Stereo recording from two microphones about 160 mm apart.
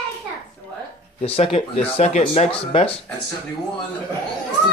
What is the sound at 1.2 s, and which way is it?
Speech, 40° left (ahead or behind).